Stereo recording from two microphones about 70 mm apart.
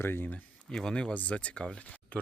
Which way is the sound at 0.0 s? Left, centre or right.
Left.